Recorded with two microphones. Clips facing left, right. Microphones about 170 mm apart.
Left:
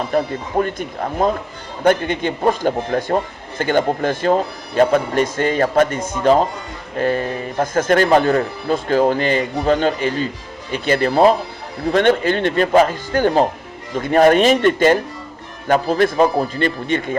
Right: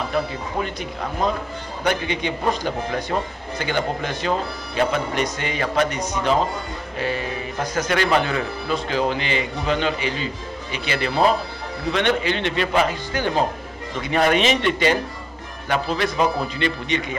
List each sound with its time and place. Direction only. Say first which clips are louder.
0.1 s speech: left 8 dB; 50° left (ahead or behind)